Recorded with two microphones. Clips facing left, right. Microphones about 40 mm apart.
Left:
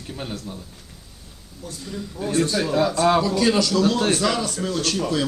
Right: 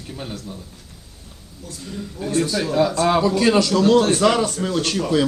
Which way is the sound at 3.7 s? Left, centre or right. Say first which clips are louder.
Right 4 dB; right.